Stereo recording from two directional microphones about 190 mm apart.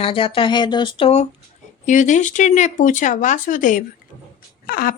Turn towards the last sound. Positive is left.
turn(degrees=50)  # may be behind; listen again after turning